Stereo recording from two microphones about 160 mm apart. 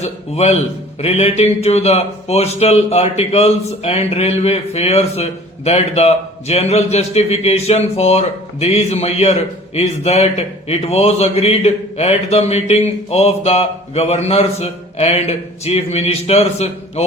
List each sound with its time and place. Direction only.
0.0 s a man's voice: 40° left (ahead or behind)